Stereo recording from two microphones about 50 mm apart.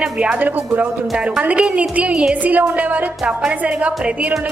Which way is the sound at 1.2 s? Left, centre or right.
Right.